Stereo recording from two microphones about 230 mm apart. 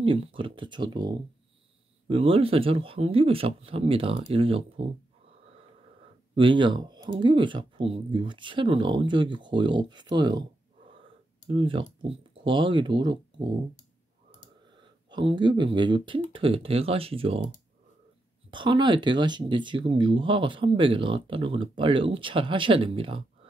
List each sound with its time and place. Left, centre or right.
0.0 s speech: right
6.3 s speech: right
11.4 s speech: right
14.8 s speech: centre
18.5 s speech: right